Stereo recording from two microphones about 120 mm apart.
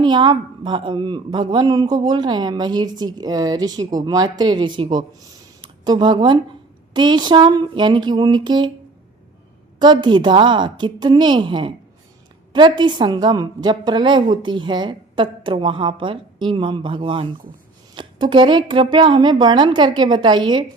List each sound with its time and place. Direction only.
0.0 s a woman's voice: 40° right (ahead or behind)
9.7 s a woman's voice: 40° right (ahead or behind)